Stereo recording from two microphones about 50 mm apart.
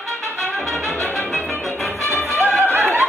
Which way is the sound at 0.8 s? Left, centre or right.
Left.